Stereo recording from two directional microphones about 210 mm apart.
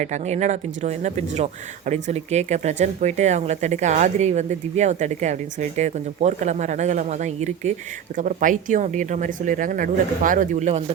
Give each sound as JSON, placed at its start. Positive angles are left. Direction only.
{"t": 0.0, "sound": "speech", "side_deg": -35}